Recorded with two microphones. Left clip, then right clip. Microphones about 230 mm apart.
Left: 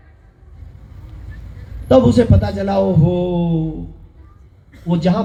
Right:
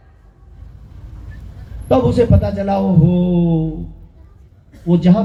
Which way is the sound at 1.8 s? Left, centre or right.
Left.